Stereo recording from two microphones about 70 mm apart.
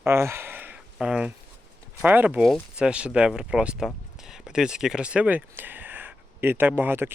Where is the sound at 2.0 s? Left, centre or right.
Right.